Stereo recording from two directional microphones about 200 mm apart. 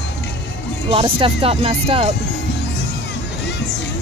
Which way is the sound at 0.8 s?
25° right (ahead or behind).